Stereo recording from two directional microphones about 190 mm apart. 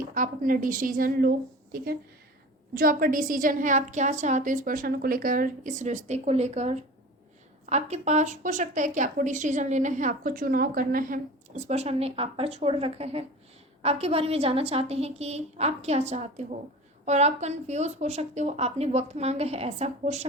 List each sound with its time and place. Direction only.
0.1 s a woman's voice: 45° right (ahead or behind)